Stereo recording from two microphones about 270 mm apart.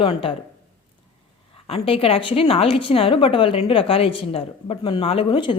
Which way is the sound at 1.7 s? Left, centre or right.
Left.